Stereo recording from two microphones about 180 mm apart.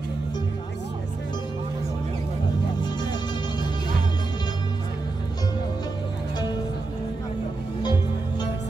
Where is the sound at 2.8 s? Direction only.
25° left (ahead or behind).